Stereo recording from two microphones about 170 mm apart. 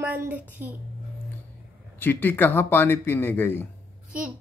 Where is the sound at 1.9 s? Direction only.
10° left (ahead or behind).